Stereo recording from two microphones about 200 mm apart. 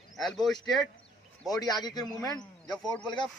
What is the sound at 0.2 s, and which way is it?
Speech, centre (ahead or behind).